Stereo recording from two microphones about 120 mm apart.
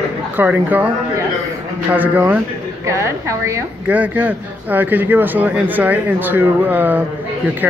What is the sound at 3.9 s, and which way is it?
A man's voice, 10° right (ahead or behind).